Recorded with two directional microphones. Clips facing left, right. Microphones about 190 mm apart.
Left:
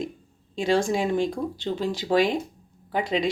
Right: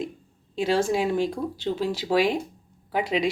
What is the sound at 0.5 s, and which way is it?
Speech, 5° right (ahead or behind).